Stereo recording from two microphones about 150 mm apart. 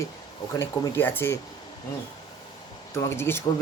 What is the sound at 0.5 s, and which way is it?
Speech, 15° left (ahead or behind).